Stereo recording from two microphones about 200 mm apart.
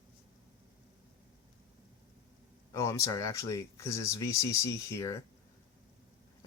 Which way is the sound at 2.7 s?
15° left (ahead or behind).